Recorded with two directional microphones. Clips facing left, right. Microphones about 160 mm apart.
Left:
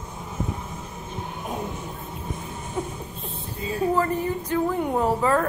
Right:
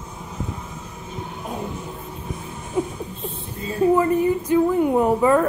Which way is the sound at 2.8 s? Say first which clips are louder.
Right 6 dB; 10° right (ahead or behind).